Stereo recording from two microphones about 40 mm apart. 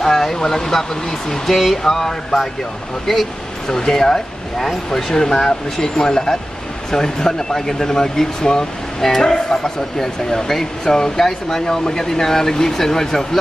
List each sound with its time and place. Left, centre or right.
0.0 s speech: centre